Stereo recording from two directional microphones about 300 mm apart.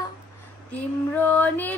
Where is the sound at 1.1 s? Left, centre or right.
Centre.